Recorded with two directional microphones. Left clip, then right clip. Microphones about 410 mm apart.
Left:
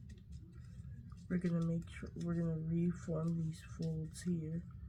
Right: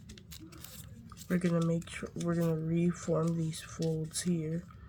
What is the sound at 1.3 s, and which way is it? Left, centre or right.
Speech, right.